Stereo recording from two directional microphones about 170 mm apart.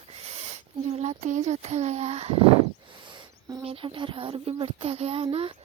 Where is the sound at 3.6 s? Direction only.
30° right (ahead or behind).